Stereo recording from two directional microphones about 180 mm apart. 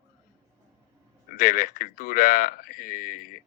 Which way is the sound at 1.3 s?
55° left (ahead or behind).